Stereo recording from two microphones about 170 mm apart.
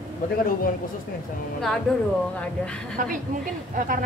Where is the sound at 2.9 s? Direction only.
55° right (ahead or behind).